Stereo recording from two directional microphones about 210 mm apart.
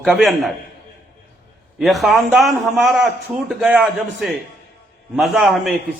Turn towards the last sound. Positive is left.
turn(degrees=0)  # may be behind; listen again after turning